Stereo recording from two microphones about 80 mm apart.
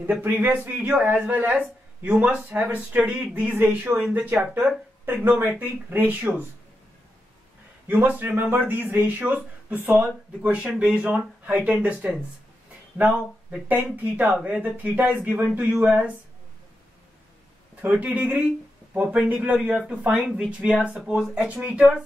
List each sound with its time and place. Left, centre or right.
0.2 s speech: right
7.9 s speech: right
17.8 s speech: centre
20.2 s speech: centre